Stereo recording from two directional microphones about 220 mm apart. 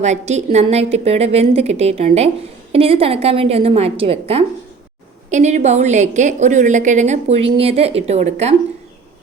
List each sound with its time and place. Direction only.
0.0 s a woman's voice: 30° right (ahead or behind)